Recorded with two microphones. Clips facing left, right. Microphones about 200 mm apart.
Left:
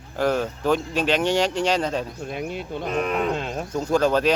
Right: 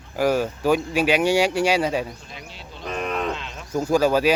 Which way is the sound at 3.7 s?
5° right (ahead or behind).